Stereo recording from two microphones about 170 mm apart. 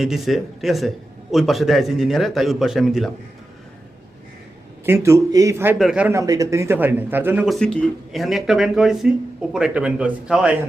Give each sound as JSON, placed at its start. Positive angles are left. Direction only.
{"t": 0.0, "sound": "speech", "side_deg": 0}
{"t": 4.9, "sound": "speech", "side_deg": -15}
{"t": 5.8, "sound": "speech", "side_deg": -5}
{"t": 6.1, "sound": "speech", "side_deg": -20}
{"t": 7.4, "sound": "speech", "side_deg": 0}